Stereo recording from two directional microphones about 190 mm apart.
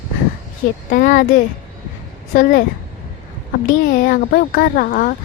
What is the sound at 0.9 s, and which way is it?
Speech, 50° left (ahead or behind).